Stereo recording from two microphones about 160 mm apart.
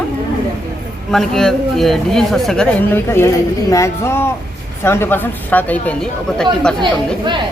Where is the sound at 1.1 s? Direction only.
5° left (ahead or behind).